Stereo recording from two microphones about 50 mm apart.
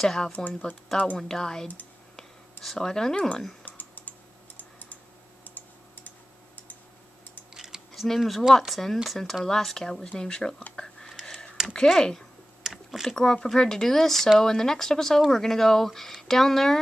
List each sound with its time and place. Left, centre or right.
0.0 s speech: centre
0.3 s speech: left
1.1 s speech: centre
3.6 s typing: left
4.6 s tick-tock: left
7.5 s a sound: centre
7.9 s speech: centre
10.8 s a sound: centre
11.7 s speech: centre
12.6 s a sound: centre
13.1 s speech: centre